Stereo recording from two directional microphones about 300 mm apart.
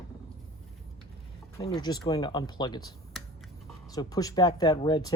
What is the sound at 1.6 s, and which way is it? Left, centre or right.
Speech, centre.